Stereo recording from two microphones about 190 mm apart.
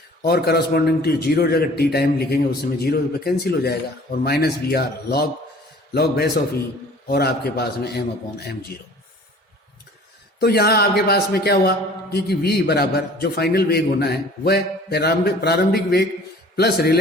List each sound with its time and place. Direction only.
0.2 s a man's voice: 60° left (ahead or behind)
10.4 s a man's voice: 55° left (ahead or behind)